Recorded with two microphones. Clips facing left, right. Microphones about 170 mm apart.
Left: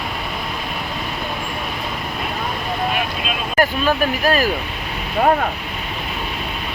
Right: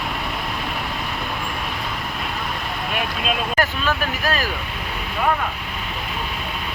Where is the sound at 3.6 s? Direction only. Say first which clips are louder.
Left 5 dB; 40° left (ahead or behind).